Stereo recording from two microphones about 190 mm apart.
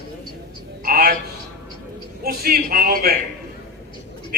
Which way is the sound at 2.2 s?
55° right (ahead or behind).